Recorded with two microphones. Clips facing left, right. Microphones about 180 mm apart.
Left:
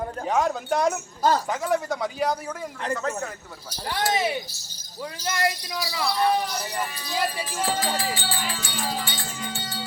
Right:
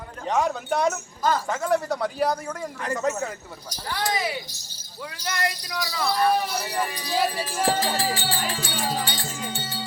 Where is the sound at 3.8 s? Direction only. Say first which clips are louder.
Left 2 dB; 20° left (ahead or behind).